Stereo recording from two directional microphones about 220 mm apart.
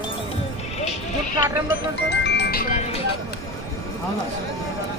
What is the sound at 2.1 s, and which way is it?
Music, 50° left (ahead or behind).